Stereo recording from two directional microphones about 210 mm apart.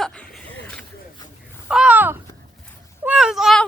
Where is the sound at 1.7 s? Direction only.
5° right (ahead or behind).